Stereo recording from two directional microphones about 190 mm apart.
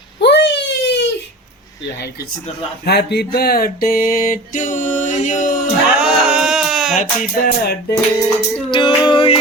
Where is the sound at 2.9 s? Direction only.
60° left (ahead or behind); by 5.6 s 40° left (ahead or behind).